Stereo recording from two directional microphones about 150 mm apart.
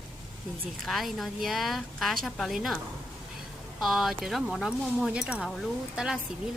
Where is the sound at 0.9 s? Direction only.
Centre (ahead or behind).